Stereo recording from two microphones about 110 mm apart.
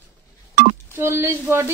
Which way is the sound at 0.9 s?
25° right (ahead or behind).